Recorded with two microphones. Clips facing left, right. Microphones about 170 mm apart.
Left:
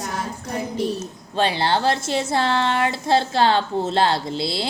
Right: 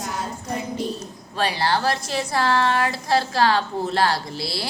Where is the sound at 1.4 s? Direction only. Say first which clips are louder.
Left 2 dB; 25° left (ahead or behind).